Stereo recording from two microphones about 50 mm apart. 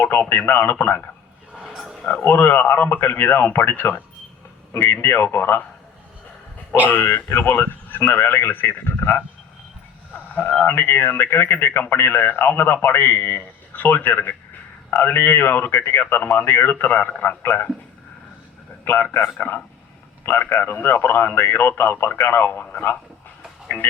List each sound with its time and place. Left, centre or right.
0.0 s speech: left
1.6 s a sound: centre
2.2 s speech: left
6.9 s speech: left
10.7 s speech: left
19.1 s speech: left